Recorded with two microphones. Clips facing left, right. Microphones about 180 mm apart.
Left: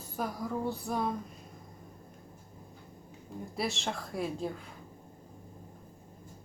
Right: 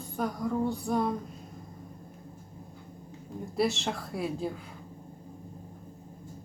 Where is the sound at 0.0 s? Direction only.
Centre (ahead or behind).